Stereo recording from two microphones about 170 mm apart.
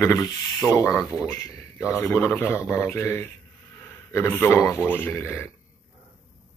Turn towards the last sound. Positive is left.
turn(degrees=15)  # may be behind; listen again after turning